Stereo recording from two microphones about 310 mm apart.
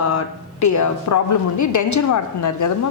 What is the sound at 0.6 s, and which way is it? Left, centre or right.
A woman's voice, left.